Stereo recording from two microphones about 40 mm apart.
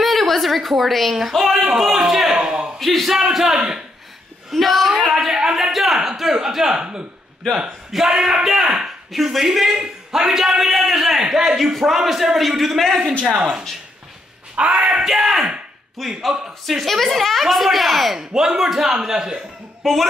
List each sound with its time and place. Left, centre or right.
0.0 s a woman's voice: centre
2.8 s speech: centre
3.1 s a man's voice: centre
5.1 s a sound: centre
5.9 s a man's voice: centre
7.4 s a man's voice: centre
7.9 s a man's voice: centre
9.1 s a man's voice: centre
13.4 s a man's voice: centre
14.7 s a man's voice: centre
18.3 s a man's voice: centre
19.8 s speech: centre